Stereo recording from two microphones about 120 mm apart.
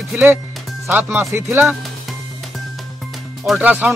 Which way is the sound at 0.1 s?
15° right (ahead or behind).